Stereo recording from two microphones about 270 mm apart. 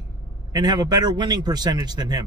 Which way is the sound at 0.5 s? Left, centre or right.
Centre.